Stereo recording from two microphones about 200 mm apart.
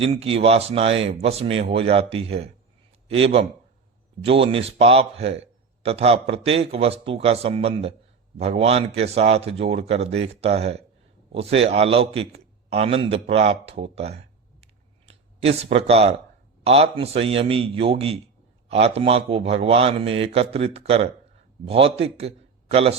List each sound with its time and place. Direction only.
0.0 s a man's voice: 30° right (ahead or behind)